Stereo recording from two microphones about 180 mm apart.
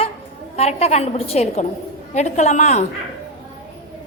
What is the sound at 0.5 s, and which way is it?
A woman's voice, 35° left (ahead or behind).